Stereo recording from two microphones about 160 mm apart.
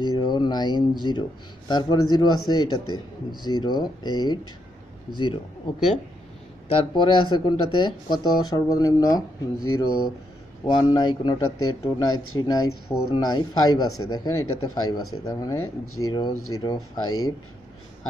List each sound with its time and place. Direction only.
0.0 s speech: 25° left (ahead or behind)
6.7 s speech: 35° left (ahead or behind)